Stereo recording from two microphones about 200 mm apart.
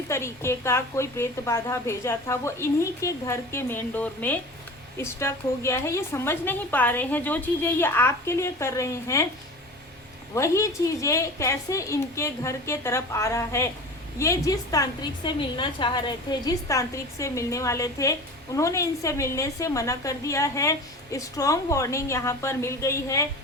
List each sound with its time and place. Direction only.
0.1 s a woman's voice: 15° left (ahead or behind)
10.3 s a woman's voice: 15° left (ahead or behind)